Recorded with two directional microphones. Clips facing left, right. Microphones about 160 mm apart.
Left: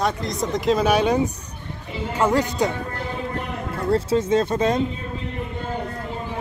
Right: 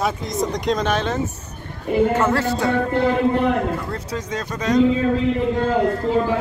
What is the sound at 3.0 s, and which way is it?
Speech, 85° right.